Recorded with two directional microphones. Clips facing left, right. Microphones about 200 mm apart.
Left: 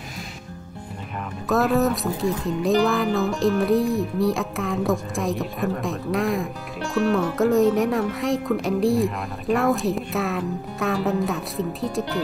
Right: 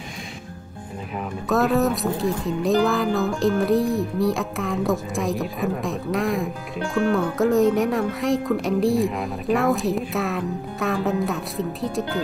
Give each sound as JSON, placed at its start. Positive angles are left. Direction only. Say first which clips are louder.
{"t": 1.5, "sound": "speech", "louder": "even", "side_deg": 0}